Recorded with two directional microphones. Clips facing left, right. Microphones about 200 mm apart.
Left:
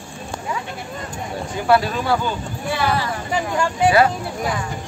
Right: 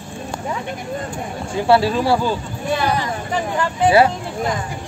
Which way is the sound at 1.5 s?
30° right (ahead or behind).